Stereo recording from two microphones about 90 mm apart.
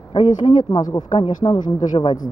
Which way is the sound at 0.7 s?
45° left (ahead or behind).